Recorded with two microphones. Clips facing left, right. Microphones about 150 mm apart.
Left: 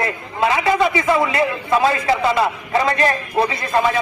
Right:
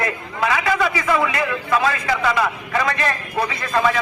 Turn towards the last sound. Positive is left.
turn(degrees=25)  # may be behind; listen again after turning